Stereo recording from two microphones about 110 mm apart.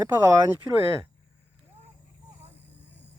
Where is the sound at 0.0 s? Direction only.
20° right (ahead or behind).